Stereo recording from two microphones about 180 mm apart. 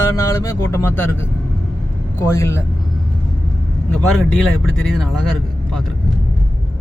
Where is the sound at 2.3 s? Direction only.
15° left (ahead or behind).